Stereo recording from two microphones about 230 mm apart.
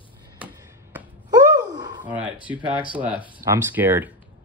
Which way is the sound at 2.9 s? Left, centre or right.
Centre.